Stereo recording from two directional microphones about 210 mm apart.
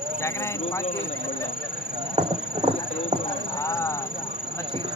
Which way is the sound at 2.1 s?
25° right (ahead or behind).